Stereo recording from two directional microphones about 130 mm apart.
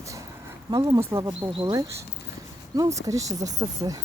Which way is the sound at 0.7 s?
30° right (ahead or behind).